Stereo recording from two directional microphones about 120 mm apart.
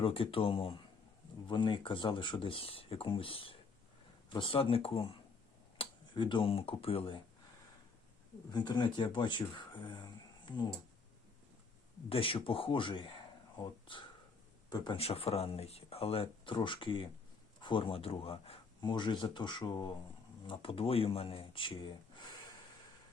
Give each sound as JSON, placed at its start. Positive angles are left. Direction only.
{"t": 0.0, "sound": "speech", "side_deg": 50}
{"t": 8.5, "sound": "speech", "side_deg": 35}
{"t": 12.0, "sound": "speech", "side_deg": 50}
{"t": 14.9, "sound": "speech", "side_deg": 55}